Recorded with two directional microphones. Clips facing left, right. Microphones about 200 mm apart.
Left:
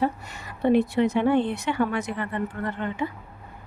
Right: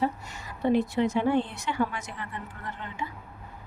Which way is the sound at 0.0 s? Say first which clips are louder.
Left 3 dB; 60° left (ahead or behind).